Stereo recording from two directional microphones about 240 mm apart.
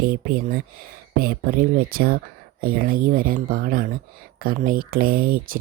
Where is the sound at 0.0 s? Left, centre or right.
Right.